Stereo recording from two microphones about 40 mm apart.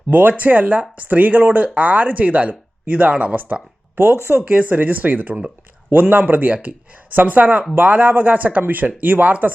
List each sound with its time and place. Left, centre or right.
0.1 s speech: right
3.9 s speech: right
4.4 s speech: right